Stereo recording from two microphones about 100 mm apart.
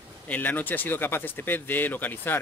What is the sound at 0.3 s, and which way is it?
Speech, 15° left (ahead or behind).